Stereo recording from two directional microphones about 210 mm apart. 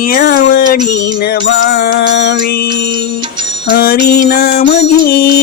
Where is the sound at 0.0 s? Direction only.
40° left (ahead or behind).